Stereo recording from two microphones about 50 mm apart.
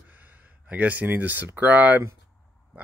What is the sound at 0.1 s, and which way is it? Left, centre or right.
Speech, right.